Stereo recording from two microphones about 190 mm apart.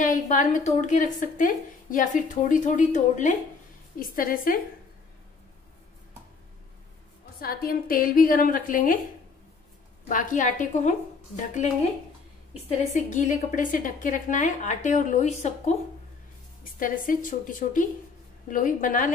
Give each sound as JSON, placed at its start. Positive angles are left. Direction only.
{"t": 0.0, "sound": "a woman's voice", "side_deg": 40}
{"t": 7.3, "sound": "a woman's voice", "side_deg": 50}
{"t": 10.0, "sound": "a woman's voice", "side_deg": 45}
{"t": 16.7, "sound": "a woman's voice", "side_deg": 45}